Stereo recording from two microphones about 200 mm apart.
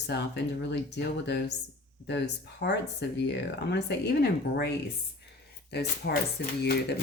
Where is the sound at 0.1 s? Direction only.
55° left (ahead or behind).